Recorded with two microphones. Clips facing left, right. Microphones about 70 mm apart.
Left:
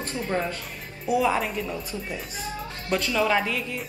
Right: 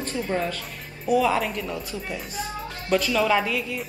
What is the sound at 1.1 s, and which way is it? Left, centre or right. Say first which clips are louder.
Speech: right 2 dB; centre.